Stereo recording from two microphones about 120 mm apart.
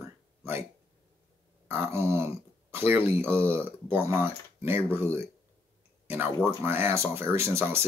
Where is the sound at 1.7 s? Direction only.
20° right (ahead or behind).